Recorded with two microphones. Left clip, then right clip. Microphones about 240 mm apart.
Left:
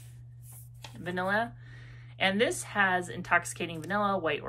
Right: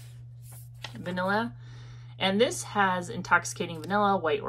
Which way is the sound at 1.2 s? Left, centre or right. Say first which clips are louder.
Right 1 dB; centre.